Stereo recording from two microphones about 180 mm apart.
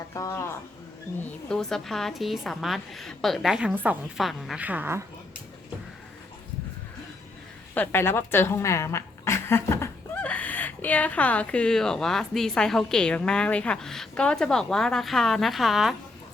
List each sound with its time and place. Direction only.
0.1 s speech: 15° left (ahead or behind)
1.5 s speech: 5° left (ahead or behind)
7.7 s speech: 15° left (ahead or behind)